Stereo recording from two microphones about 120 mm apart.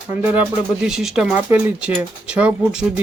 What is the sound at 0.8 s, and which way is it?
Speech, 5° right (ahead or behind).